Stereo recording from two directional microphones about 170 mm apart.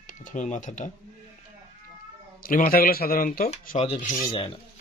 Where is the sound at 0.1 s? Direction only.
50° left (ahead or behind).